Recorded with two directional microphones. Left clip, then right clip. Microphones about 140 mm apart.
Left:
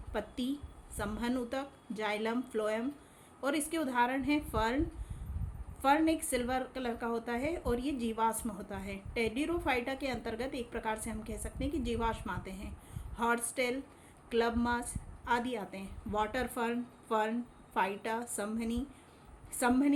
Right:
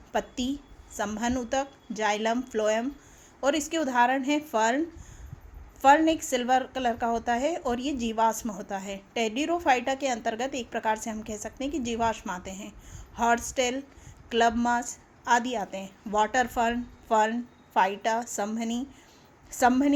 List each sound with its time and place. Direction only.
0.1 s a woman's voice: 40° right (ahead or behind)
5.8 s a woman's voice: 40° right (ahead or behind)